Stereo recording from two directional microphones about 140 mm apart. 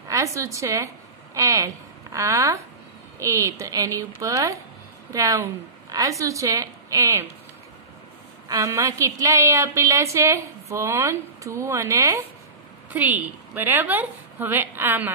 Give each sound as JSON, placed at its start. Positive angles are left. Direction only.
{"t": 0.1, "sound": "a woman's voice", "side_deg": -20}
{"t": 8.5, "sound": "a woman's voice", "side_deg": -25}